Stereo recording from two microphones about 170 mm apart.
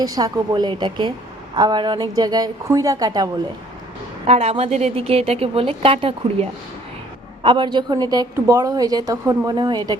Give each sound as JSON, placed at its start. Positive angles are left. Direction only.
{"t": 0.0, "sound": "a woman's voice", "side_deg": -20}
{"t": 4.3, "sound": "a woman's voice", "side_deg": -35}